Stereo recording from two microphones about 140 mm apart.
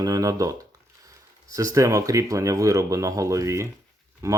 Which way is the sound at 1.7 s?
25° right (ahead or behind).